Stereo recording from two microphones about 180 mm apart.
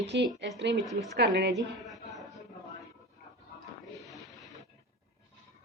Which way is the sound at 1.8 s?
Centre (ahead or behind).